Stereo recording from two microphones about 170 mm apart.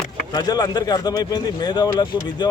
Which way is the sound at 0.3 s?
20° left (ahead or behind).